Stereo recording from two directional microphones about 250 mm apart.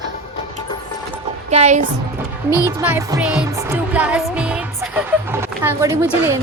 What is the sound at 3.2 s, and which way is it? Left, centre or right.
Music, centre.